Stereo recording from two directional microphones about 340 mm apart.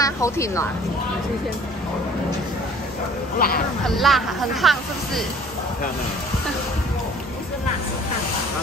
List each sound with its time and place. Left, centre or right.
0.0 s speech: centre
3.3 s speech: left
3.8 s speech: centre